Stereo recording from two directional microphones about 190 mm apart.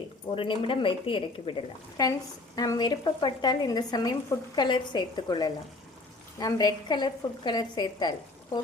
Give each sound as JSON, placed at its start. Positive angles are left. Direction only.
{"t": 0.3, "sound": "speech", "side_deg": 25}